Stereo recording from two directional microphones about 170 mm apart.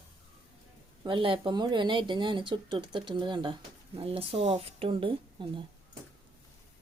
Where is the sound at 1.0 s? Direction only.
30° right (ahead or behind).